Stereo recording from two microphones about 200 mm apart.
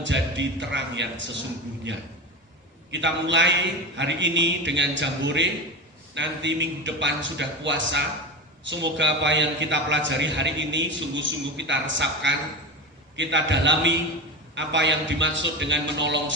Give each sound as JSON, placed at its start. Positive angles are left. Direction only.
{"t": 0.0, "sound": "a man's voice", "side_deg": -65}
{"t": 2.9, "sound": "a man's voice", "side_deg": -65}